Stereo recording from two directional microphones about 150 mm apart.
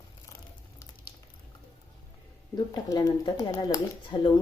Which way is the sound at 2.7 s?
25° left (ahead or behind).